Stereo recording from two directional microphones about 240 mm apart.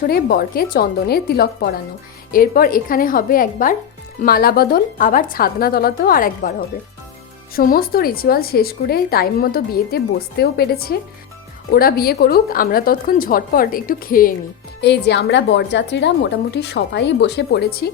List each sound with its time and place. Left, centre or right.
0.1 s a woman's voice: left